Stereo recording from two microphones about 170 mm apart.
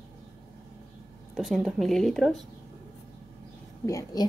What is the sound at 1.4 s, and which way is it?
Speech, centre (ahead or behind).